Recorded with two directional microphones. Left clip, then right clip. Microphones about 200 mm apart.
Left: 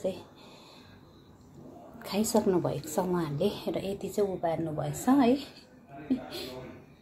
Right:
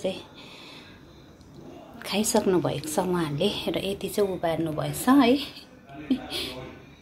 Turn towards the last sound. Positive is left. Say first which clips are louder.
# right 5 dB
turn(degrees=10)  # may be behind; listen again after turning